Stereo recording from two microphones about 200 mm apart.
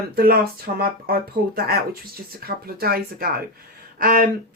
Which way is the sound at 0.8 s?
50° right (ahead or behind).